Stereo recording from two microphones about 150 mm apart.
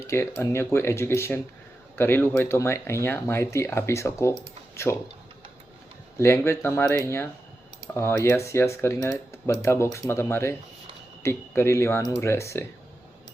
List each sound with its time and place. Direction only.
0.0 s speech: 15° left (ahead or behind)
6.1 s speech: 15° left (ahead or behind)